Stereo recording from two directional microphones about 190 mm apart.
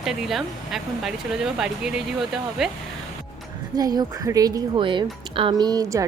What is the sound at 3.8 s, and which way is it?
Speech, 20° right (ahead or behind).